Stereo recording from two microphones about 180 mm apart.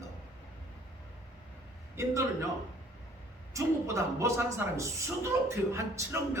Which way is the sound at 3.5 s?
15° right (ahead or behind).